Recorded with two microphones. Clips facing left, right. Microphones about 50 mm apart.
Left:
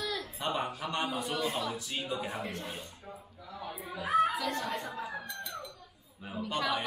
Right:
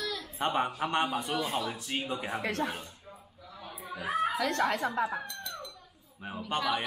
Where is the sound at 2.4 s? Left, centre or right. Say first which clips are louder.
Right 8 dB; right.